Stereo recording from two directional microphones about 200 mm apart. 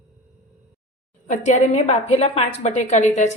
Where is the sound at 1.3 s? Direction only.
35° left (ahead or behind).